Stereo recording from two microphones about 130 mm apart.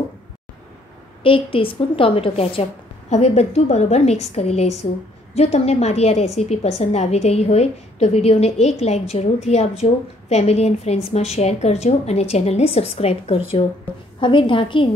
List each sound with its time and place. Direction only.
1.2 s a woman's voice: 45° left (ahead or behind)
3.1 s a woman's voice: 55° left (ahead or behind)
14.2 s a woman's voice: 40° left (ahead or behind)